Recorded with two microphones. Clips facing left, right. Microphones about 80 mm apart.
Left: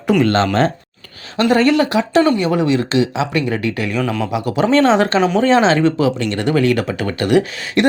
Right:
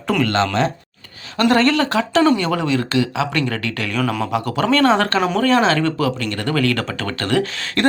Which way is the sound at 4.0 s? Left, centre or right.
Centre.